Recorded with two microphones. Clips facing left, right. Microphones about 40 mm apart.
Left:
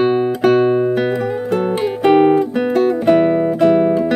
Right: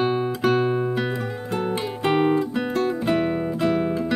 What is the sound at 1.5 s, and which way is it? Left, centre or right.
Guitar, left.